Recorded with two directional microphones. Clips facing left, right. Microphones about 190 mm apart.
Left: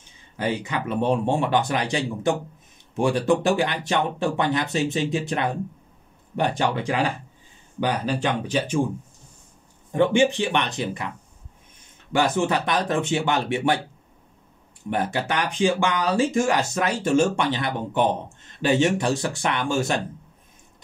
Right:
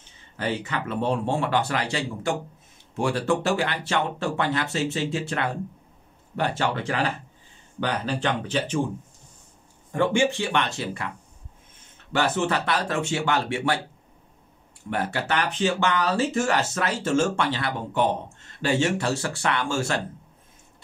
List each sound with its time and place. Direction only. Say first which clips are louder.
0.4 s speech: left 2 dB; 15° left (ahead or behind)
9.9 s speech: left 3 dB; 20° left (ahead or behind)
12.1 s speech: left 2 dB; 15° left (ahead or behind)
14.9 s speech: left 2 dB; 15° left (ahead or behind)